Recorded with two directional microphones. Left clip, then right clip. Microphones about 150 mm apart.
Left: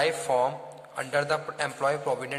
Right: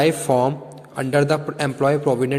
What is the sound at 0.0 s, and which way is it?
A man's voice, 35° right (ahead or behind).